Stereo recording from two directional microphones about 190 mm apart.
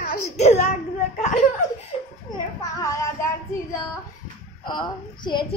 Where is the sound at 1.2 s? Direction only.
40° left (ahead or behind).